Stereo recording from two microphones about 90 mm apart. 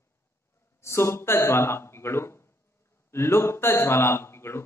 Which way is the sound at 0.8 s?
30° left (ahead or behind).